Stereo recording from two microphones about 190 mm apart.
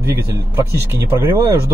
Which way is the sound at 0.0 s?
15° right (ahead or behind).